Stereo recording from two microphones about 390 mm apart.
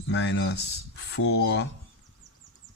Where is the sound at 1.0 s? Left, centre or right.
Left.